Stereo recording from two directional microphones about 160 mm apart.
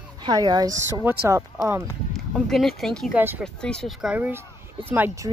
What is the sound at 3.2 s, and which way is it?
Speech, 10° right (ahead or behind).